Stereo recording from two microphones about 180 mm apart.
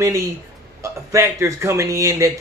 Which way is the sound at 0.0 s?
15° right (ahead or behind).